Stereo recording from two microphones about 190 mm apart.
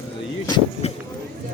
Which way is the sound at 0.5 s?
30° left (ahead or behind).